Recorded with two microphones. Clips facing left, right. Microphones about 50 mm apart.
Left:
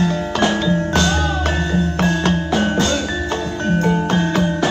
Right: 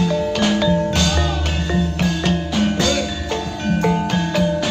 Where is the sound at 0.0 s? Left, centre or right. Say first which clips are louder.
Even; left.